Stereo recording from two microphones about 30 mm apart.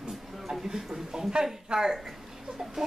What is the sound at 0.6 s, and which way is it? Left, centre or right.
Speech, right.